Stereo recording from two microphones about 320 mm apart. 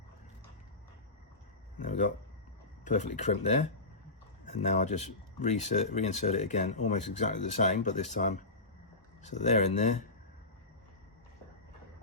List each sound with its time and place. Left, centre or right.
1.8 s speech: left